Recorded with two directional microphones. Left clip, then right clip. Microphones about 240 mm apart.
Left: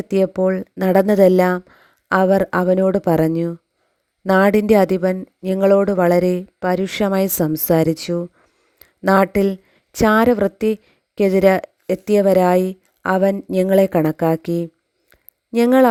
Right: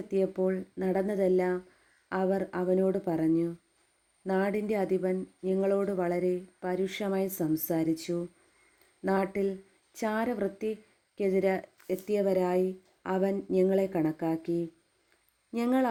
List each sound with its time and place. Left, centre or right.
0.1 s a woman's voice: left